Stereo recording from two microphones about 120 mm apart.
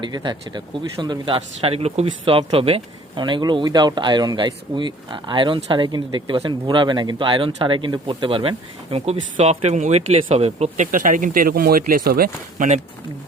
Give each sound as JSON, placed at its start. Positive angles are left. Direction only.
{"t": 0.0, "sound": "speech", "side_deg": -40}
{"t": 12.5, "sound": "speech", "side_deg": -90}